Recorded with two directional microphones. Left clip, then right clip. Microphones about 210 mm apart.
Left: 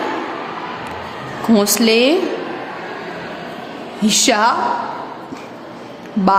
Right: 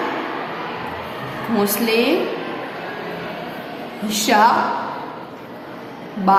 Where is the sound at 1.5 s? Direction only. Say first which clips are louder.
Left 4 dB; 45° left (ahead or behind).